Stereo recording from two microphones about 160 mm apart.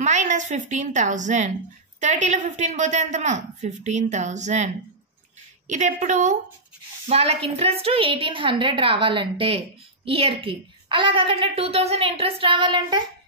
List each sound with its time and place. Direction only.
0.0 s a woman's voice: 45° right (ahead or behind)
5.7 s a woman's voice: 50° right (ahead or behind); by 13.0 s 30° right (ahead or behind)